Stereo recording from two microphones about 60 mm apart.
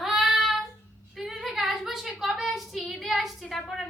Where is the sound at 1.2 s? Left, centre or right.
Centre.